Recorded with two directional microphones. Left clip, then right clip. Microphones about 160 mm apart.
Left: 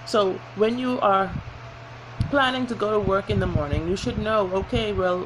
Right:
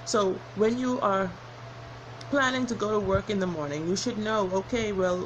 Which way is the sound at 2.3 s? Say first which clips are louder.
Left 4 dB; 20° right (ahead or behind).